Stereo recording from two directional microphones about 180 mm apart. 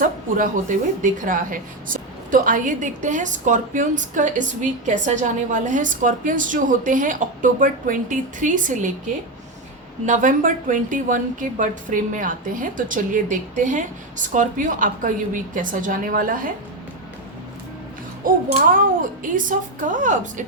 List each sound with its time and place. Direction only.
0.0 s a woman's voice: 50° right (ahead or behind)
10.1 s a woman's voice: 45° right (ahead or behind)
18.5 s a woman's voice: 50° right (ahead or behind)